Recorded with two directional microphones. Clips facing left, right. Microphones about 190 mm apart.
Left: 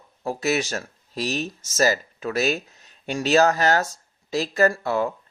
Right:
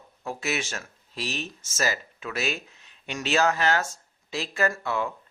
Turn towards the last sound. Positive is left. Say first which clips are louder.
# left 6 dB
turn(degrees=40)  # may be behind; listen again after turning